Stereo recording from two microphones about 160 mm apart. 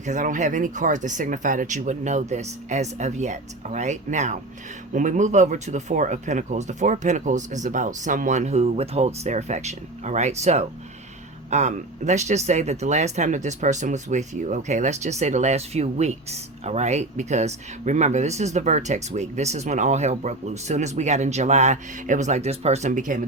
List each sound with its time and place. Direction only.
0.0 s speech: 50° right (ahead or behind)